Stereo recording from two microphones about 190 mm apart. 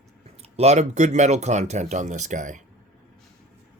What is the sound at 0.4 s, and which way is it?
Speech, 35° right (ahead or behind).